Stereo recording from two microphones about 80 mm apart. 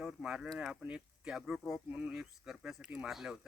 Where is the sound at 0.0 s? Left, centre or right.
Centre.